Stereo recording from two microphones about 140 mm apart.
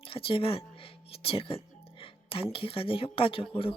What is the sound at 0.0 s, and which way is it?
Speech, 40° left (ahead or behind).